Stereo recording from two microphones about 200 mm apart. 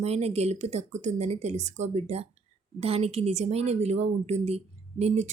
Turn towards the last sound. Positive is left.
turn(degrees=-35)  # may be behind; listen again after turning